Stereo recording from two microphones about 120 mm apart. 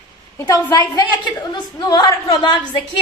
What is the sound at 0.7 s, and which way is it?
A woman's voice, 35° left (ahead or behind).